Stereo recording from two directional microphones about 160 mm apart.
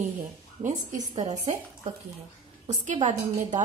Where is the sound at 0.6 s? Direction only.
50° right (ahead or behind).